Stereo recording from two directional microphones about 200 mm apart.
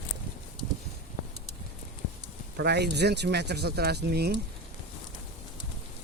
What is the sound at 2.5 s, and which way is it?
Speech, 55° right (ahead or behind).